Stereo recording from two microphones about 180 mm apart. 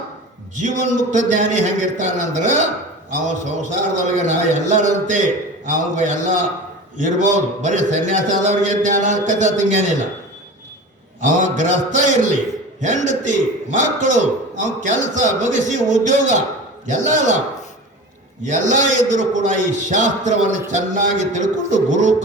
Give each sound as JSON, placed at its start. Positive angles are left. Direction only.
{"t": 0.5, "sound": "a man's voice", "side_deg": -45}
{"t": 11.2, "sound": "a man's voice", "side_deg": -45}
{"t": 18.4, "sound": "a man's voice", "side_deg": -45}